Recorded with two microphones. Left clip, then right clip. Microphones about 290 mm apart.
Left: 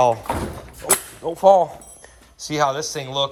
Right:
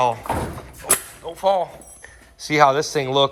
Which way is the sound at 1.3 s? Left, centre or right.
Left.